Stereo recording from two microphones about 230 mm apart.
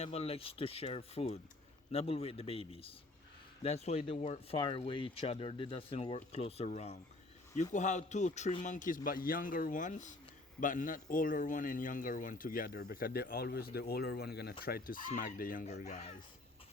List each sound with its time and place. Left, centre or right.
0.0 s a man's voice: left